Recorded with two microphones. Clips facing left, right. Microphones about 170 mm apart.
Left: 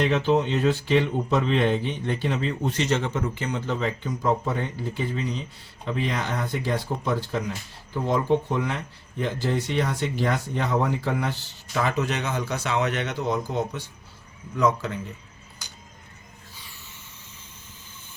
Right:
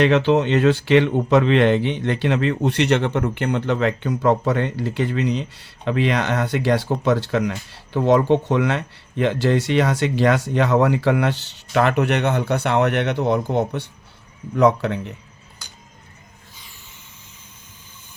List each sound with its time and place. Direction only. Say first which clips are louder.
0.0 s speech: right 5 dB; 85° right; by 15.1 s 65° right (ahead or behind)